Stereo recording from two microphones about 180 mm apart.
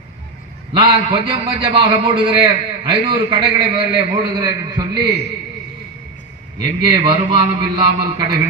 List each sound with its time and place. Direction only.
0.7 s a man's voice: 25° right (ahead or behind)
6.6 s a man's voice: 25° right (ahead or behind)